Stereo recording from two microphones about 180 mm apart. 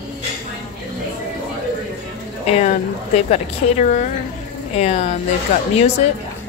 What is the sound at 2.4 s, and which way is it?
A woman's voice, 35° left (ahead or behind).